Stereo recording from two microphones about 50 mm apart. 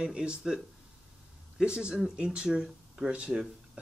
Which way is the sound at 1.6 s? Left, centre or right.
Centre.